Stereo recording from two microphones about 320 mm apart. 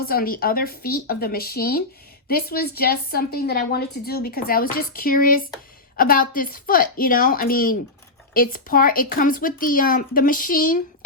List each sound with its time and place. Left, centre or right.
0.0 s a woman's voice: left